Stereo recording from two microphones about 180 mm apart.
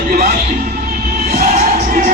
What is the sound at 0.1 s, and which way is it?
Music, 50° right (ahead or behind).